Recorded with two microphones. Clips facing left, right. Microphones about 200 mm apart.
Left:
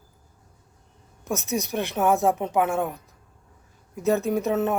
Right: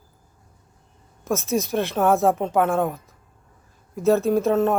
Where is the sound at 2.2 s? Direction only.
55° right (ahead or behind).